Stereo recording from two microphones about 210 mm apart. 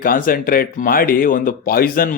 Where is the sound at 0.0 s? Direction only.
40° left (ahead or behind).